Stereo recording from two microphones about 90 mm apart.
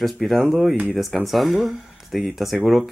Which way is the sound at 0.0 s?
Centre (ahead or behind).